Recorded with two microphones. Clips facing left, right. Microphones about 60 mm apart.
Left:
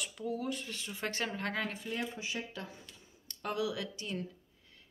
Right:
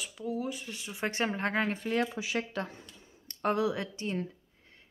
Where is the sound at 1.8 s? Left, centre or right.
Right.